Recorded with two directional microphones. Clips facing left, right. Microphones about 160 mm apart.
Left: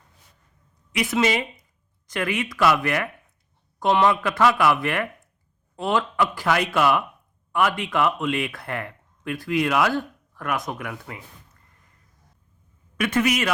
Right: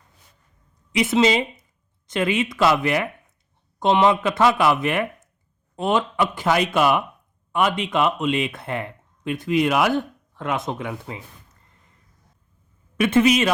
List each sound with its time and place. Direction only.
0.9 s speech: 25° right (ahead or behind)
13.0 s speech: 25° right (ahead or behind)